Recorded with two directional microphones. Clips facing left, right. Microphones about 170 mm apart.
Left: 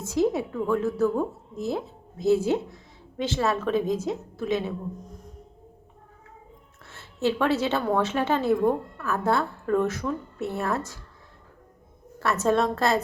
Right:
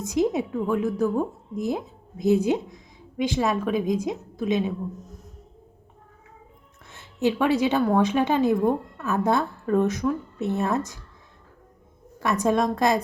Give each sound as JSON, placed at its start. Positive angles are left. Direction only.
{"t": 0.0, "sound": "a woman's voice", "side_deg": -15}
{"t": 6.8, "sound": "a sound", "side_deg": -15}
{"t": 7.9, "sound": "a woman's voice", "side_deg": -15}
{"t": 12.2, "sound": "a woman's voice", "side_deg": -15}